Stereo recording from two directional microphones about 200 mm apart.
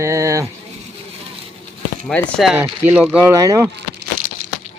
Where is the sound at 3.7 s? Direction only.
55° right (ahead or behind).